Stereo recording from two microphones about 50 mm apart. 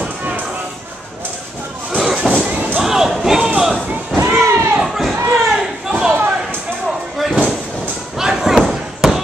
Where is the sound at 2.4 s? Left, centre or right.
Right.